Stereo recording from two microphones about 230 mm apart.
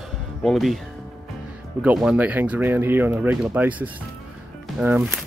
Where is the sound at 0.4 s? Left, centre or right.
Centre.